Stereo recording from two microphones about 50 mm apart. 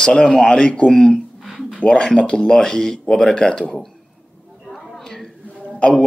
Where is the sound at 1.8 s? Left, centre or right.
Centre.